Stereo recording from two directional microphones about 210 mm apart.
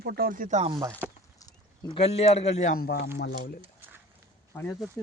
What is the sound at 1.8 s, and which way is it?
Speech, 25° left (ahead or behind).